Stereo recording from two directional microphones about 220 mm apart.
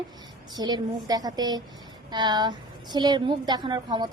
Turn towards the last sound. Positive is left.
turn(degrees=-20)  # may be behind; listen again after turning